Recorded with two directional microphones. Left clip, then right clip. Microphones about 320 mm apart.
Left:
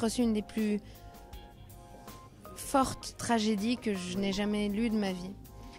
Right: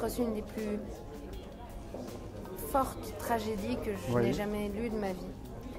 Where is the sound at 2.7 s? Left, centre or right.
Left.